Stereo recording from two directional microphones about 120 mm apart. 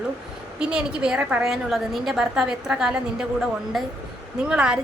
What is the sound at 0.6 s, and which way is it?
A woman's voice, 5° right (ahead or behind).